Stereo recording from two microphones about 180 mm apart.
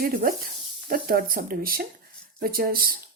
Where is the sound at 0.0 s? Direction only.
50° right (ahead or behind).